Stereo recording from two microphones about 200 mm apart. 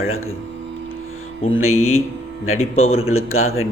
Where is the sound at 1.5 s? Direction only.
90° left.